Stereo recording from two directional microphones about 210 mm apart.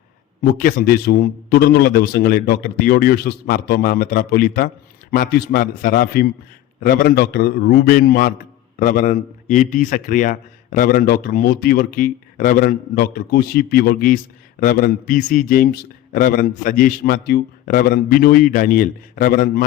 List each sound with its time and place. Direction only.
0.5 s a man's voice: 45° left (ahead or behind)